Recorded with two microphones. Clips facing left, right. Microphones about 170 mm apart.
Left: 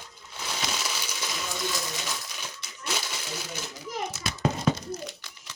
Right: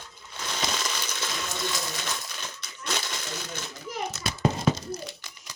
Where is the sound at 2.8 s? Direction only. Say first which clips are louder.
Right 1 dB; 10° left (ahead or behind).